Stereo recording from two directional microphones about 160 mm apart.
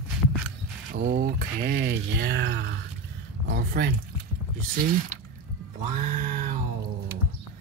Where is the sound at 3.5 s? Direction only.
80° right.